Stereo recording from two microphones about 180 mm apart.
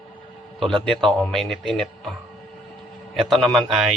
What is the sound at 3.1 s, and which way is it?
Speech, centre (ahead or behind).